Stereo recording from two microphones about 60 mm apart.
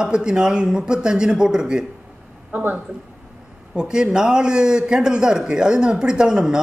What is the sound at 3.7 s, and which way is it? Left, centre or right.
A man's voice, centre.